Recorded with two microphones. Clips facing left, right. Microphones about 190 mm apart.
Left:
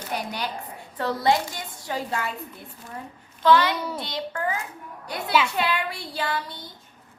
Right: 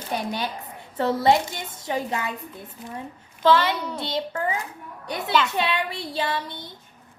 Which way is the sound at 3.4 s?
25° right (ahead or behind).